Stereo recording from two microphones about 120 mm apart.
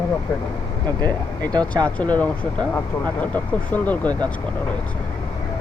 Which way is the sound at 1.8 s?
10° left (ahead or behind).